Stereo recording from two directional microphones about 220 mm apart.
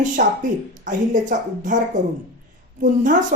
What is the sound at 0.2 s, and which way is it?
A woman's voice, 40° right (ahead or behind).